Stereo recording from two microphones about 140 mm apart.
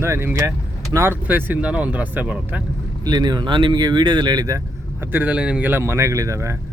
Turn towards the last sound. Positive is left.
turn(degrees=-20)  # may be behind; listen again after turning